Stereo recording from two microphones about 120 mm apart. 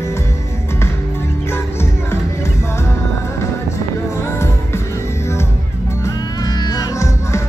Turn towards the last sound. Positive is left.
turn(degrees=25)  # may be behind; listen again after turning